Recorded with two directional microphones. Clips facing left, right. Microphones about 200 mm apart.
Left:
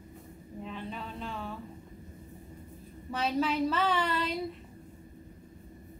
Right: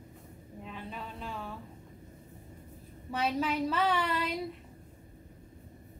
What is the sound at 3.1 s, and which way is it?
A woman's voice, 10° right (ahead or behind).